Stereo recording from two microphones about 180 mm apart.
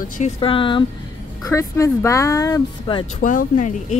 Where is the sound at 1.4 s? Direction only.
20° left (ahead or behind).